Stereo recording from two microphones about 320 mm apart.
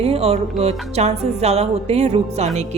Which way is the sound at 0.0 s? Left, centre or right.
Centre.